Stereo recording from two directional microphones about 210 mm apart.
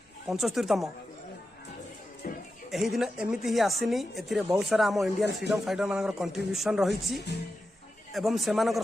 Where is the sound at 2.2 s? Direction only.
40° left (ahead or behind).